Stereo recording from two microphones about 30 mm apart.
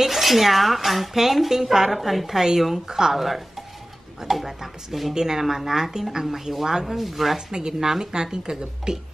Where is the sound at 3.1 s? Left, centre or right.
Centre.